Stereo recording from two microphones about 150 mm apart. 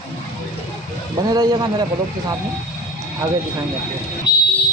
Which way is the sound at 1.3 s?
25° right (ahead or behind).